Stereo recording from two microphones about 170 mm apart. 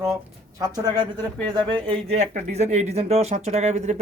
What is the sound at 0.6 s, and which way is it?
A woman's voice, 25° right (ahead or behind).